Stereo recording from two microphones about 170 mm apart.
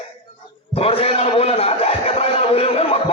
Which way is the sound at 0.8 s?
35° left (ahead or behind).